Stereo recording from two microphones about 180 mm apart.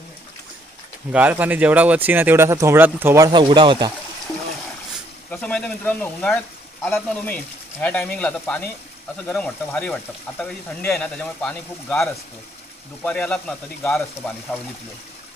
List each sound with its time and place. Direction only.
1.1 s speech: 10° right (ahead or behind)
3.3 s speech: 25° right (ahead or behind)
5.3 s speech: 5° left (ahead or behind)
13.1 s speech: 5° left (ahead or behind)